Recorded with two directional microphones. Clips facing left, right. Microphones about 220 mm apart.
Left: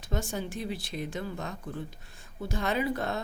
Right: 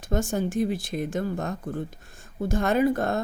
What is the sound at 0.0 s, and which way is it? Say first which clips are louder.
Speech: right 7 dB; 45° right (ahead or behind).